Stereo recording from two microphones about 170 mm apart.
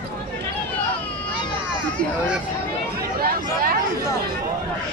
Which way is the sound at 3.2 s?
60° right (ahead or behind).